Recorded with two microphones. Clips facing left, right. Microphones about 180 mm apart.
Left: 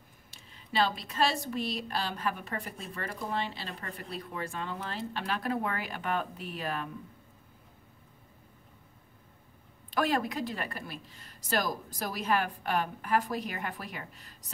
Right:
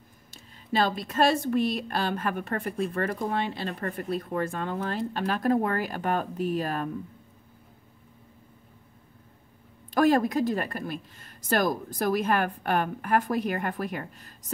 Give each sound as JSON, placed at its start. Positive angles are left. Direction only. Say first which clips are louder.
{"t": 0.3, "sound": "a woman's voice", "louder": "right 8 dB", "side_deg": -45}
{"t": 9.9, "sound": "a woman's voice", "louder": "right 8 dB", "side_deg": -45}